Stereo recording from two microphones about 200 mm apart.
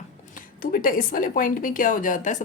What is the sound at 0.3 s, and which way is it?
Speech, 45° left (ahead or behind).